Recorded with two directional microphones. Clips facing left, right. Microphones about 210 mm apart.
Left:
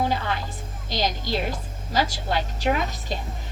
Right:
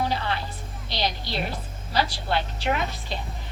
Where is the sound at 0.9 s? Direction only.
45° left (ahead or behind).